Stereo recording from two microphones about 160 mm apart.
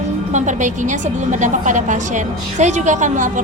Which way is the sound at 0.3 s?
50° right (ahead or behind).